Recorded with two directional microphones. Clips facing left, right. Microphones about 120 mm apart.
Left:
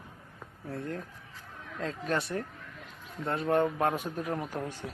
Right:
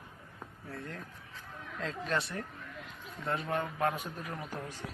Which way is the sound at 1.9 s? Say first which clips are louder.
Left 3 dB; 40° left (ahead or behind).